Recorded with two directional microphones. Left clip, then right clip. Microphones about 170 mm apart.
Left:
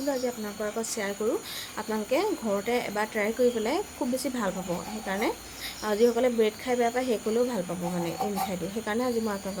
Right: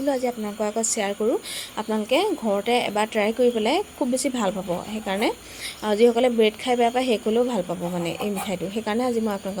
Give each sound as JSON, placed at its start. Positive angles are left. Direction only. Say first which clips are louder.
{"t": 0.6, "sound": "speech", "louder": "right 7 dB", "side_deg": -25}